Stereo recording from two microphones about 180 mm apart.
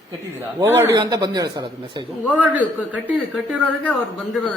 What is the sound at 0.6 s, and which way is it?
Speech, 15° right (ahead or behind).